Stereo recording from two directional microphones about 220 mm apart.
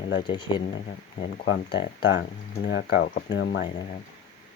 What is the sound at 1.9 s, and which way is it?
Speech, 55° left (ahead or behind).